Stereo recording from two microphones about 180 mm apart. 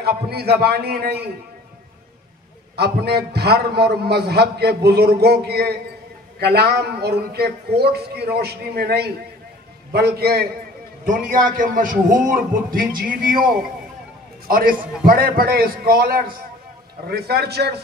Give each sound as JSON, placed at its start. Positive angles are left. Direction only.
{"t": 0.0, "sound": "a man's voice", "side_deg": -60}
{"t": 2.7, "sound": "a man's voice", "side_deg": -65}
{"t": 11.1, "sound": "a man's voice", "side_deg": -50}
{"t": 14.5, "sound": "a man's voice", "side_deg": -50}